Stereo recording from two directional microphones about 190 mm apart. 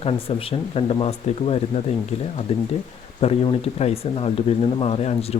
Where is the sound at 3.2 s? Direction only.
30° left (ahead or behind).